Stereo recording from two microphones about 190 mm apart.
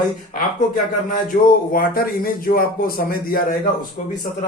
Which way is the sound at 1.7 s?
50° left (ahead or behind).